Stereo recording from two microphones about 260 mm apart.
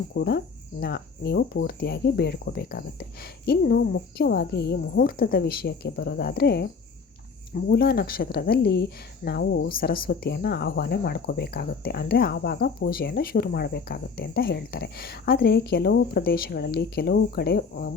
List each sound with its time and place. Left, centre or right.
0.1 s speech: left